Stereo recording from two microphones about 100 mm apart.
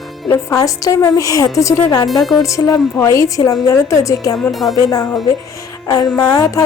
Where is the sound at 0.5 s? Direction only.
35° left (ahead or behind).